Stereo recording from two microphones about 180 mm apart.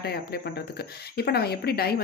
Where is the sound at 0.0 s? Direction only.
60° left (ahead or behind).